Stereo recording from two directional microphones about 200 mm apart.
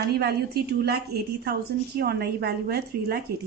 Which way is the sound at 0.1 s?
50° right (ahead or behind).